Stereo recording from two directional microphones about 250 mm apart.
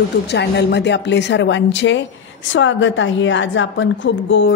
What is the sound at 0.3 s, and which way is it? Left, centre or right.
A woman's voice, left.